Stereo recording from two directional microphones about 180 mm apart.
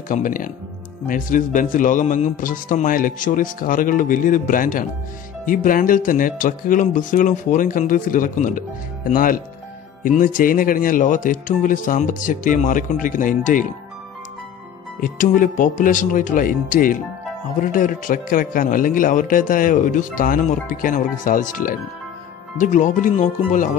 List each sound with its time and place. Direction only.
0.1 s speech: 50° left (ahead or behind)
15.0 s speech: 50° left (ahead or behind)